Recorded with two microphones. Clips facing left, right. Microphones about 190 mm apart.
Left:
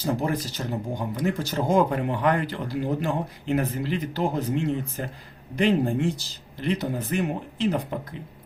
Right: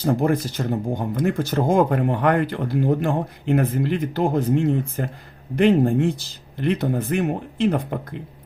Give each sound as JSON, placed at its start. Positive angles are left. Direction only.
{"t": 0.0, "sound": "speech", "side_deg": -55}